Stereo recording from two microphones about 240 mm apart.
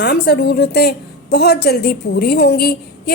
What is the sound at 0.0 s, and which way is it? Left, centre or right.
A woman's voice, left.